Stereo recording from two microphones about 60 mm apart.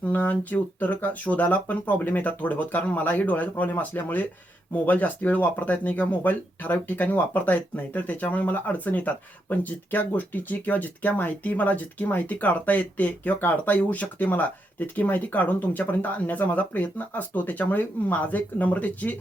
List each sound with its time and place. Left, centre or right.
0.0 s speech: left